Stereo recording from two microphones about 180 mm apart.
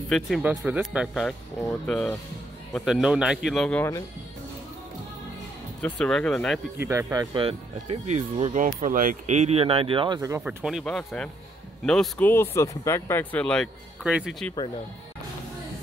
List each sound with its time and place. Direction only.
0.1 s speech: 5° right (ahead or behind)
5.8 s speech: 5° left (ahead or behind)
6.8 s speech: 15° right (ahead or behind)
7.3 s speech: 30° right (ahead or behind)
10.4 s speech: 5° right (ahead or behind)
14.0 s speech: 5° right (ahead or behind)